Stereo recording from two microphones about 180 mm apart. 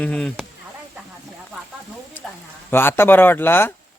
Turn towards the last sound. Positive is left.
turn(degrees=10)  # may be behind; listen again after turning